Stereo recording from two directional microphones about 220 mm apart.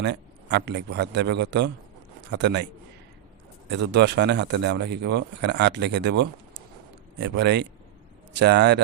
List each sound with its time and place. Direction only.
0.0 s speech: 50° right (ahead or behind)
3.7 s speech: 50° right (ahead or behind)